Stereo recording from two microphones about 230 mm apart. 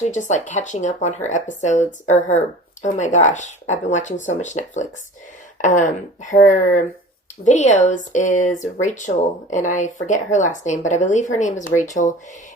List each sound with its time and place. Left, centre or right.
0.0 s speech: left